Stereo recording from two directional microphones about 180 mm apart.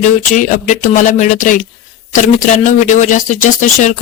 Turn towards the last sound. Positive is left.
turn(degrees=45)  # may be behind; listen again after turning